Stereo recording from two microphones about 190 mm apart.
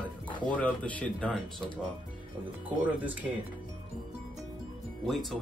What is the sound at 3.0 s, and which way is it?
Speech, 10° right (ahead or behind).